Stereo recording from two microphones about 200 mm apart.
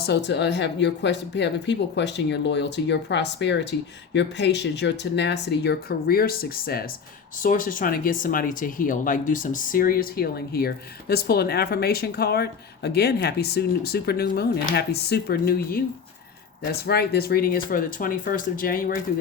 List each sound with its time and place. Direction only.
0.0 s speech: 60° left (ahead or behind)
16.8 s speech: 50° left (ahead or behind)